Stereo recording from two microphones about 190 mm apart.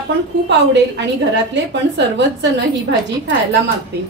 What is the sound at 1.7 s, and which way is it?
Speech, 65° right (ahead or behind).